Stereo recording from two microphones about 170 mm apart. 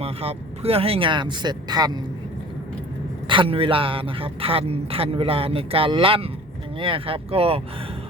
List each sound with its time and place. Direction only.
0.0 s speech: 35° right (ahead or behind)
3.2 s a man's voice: 30° right (ahead or behind)